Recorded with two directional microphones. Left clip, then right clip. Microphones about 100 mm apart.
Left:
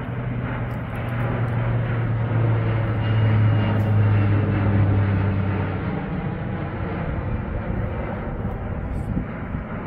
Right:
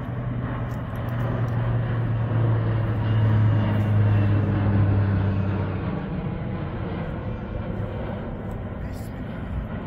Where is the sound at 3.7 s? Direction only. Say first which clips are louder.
Left 2 dB; 85° left.